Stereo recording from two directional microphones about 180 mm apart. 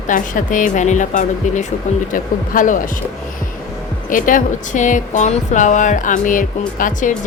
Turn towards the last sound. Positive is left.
turn(degrees=45)  # may be behind; listen again after turning